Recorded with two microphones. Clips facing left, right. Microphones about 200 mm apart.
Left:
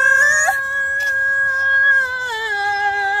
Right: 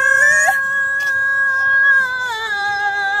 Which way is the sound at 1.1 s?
20° left (ahead or behind).